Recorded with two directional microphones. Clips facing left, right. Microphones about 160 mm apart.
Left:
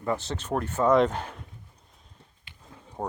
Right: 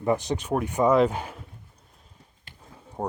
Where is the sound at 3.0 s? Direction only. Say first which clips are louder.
Right 3 dB; centre (ahead or behind).